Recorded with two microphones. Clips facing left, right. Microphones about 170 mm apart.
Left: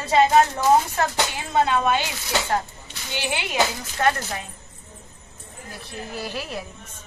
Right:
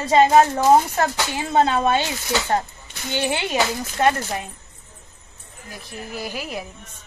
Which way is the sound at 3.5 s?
25° right (ahead or behind).